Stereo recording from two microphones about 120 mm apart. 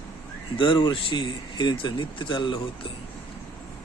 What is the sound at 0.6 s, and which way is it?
Speech, 40° left (ahead or behind).